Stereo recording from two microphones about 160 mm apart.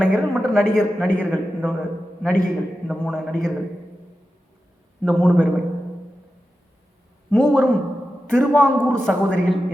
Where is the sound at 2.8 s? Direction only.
5° left (ahead or behind).